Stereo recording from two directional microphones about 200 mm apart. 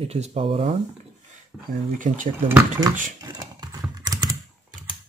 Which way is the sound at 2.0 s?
40° right (ahead or behind).